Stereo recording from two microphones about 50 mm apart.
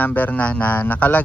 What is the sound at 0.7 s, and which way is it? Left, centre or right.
Speech, left.